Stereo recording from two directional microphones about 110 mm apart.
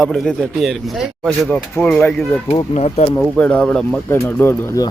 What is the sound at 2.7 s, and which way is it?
Speech, 75° left (ahead or behind).